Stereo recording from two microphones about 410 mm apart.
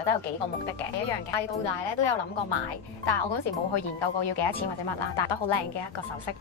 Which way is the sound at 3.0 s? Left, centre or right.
Left.